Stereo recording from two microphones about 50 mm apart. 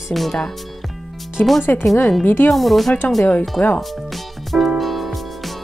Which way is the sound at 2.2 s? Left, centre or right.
Left.